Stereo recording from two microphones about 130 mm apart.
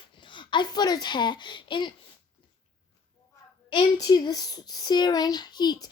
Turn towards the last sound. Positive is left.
turn(degrees=35)  # may be behind; listen again after turning